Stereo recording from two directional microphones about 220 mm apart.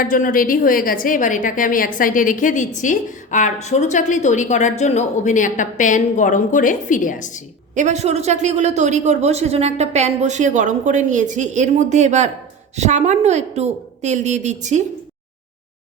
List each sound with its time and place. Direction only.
0.0 s a woman's voice: 40° left (ahead or behind)
7.8 s speech: 30° right (ahead or behind)